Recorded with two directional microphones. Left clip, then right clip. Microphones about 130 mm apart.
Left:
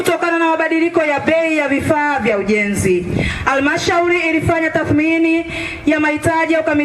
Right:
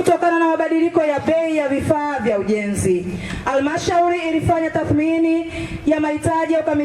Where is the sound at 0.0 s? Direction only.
35° left (ahead or behind).